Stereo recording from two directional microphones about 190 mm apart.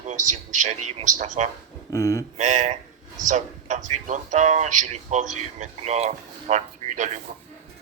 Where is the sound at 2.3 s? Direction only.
40° right (ahead or behind).